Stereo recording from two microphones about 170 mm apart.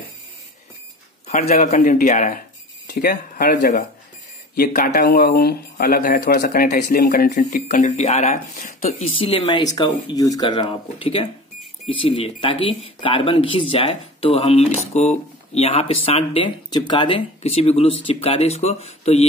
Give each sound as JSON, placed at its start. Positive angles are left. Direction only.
{"t": 1.2, "sound": "speech", "side_deg": 40}
{"t": 1.8, "sound": "speech", "side_deg": 55}
{"t": 2.9, "sound": "speech", "side_deg": 65}
{"t": 17.4, "sound": "speech", "side_deg": 35}